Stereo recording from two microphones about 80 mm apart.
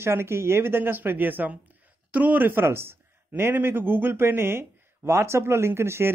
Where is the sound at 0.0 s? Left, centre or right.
Right.